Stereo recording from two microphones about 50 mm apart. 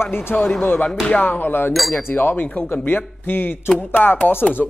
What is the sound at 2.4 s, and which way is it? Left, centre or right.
Speech, left.